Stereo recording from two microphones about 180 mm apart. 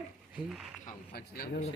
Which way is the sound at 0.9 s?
55° left (ahead or behind).